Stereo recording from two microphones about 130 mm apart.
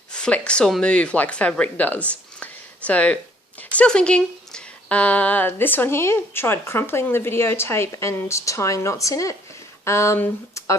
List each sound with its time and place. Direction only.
0.1 s speech: 10° left (ahead or behind)